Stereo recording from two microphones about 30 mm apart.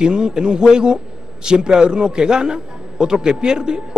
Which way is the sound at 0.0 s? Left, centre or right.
Right.